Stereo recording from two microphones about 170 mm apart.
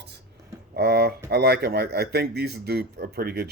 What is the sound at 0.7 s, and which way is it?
Speech, 75° right (ahead or behind).